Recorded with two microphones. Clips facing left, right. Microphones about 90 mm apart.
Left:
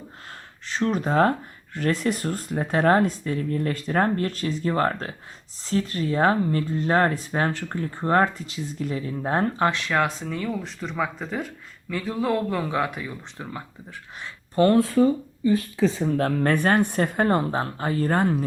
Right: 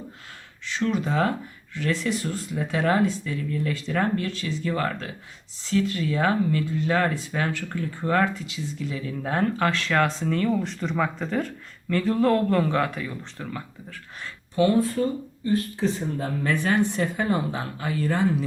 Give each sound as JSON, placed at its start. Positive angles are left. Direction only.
{"t": 0.6, "sound": "speech", "side_deg": 40}
{"t": 14.5, "sound": "speech", "side_deg": 50}
{"t": 16.1, "sound": "speech", "side_deg": 65}